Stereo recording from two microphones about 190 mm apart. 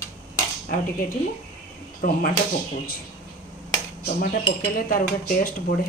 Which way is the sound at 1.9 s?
45° left (ahead or behind).